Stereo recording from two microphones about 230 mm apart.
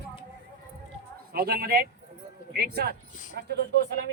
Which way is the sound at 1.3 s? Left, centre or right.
Right.